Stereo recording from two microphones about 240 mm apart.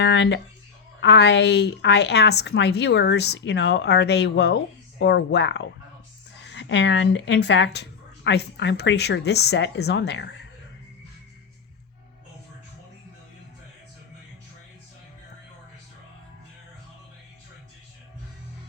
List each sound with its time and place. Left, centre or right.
0.0 s speech: left